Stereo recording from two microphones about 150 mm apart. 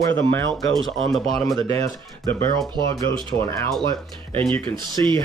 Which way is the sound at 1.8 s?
15° left (ahead or behind).